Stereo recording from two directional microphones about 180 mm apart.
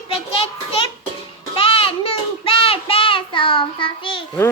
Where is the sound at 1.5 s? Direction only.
30° left (ahead or behind).